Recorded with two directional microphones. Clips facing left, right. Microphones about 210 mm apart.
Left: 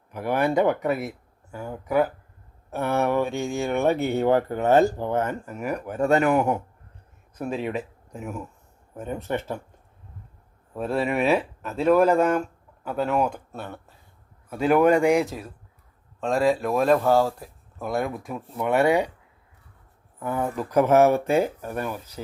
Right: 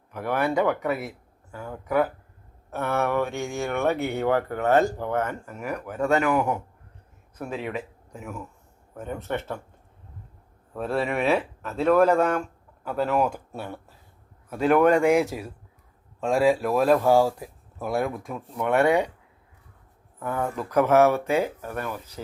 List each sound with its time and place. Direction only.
0.1 s speech: 15° left (ahead or behind)
6.0 s speech: 35° left (ahead or behind)
9.0 s speech: 15° left (ahead or behind)
10.8 s speech: centre (ahead or behind)
14.5 s speech: 5° left (ahead or behind)
20.1 s speech: 10° left (ahead or behind)
21.0 s speech: 40° left (ahead or behind)
21.6 s speech: 15° left (ahead or behind)